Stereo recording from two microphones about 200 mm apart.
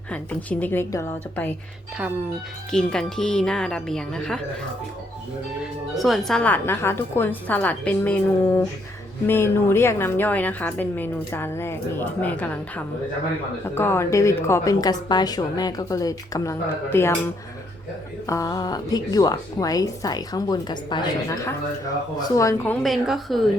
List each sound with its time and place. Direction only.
0.1 s a woman's voice: 5° left (ahead or behind)
2.7 s speech: 5° left (ahead or behind)
5.9 s a woman's voice: centre (ahead or behind)
18.3 s a woman's voice: 15° left (ahead or behind); by 23.4 s centre (ahead or behind)